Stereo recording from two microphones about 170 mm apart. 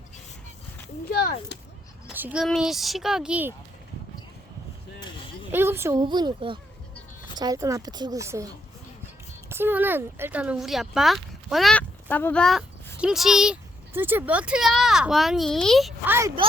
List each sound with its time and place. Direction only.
1.2 s speech: 60° left (ahead or behind)
2.1 s speech: 10° right (ahead or behind)
4.9 s a sound: 25° left (ahead or behind)
5.5 s a woman's voice: 15° right (ahead or behind)
6.0 s speech: 25° right (ahead or behind)
9.5 s speech: 15° right (ahead or behind)
16.0 s a woman's voice: 15° right (ahead or behind)